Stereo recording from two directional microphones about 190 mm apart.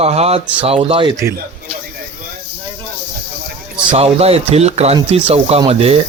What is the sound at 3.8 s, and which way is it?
Speech, 30° right (ahead or behind).